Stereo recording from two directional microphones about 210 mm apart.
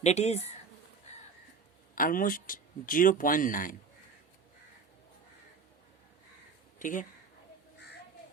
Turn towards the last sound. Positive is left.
turn(degrees=40)  # may be behind; listen again after turning